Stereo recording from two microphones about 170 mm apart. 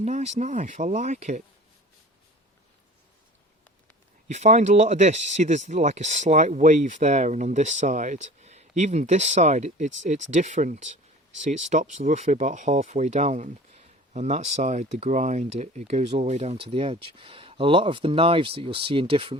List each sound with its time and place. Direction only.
0.0 s speech: 40° right (ahead or behind)
4.3 s speech: 40° right (ahead or behind)